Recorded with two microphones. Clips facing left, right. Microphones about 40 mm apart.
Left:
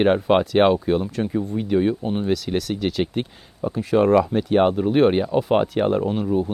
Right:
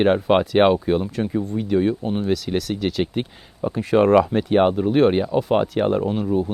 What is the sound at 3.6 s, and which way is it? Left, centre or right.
Speech, right.